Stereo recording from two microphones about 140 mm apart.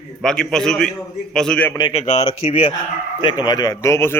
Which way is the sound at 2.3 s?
40° left (ahead or behind).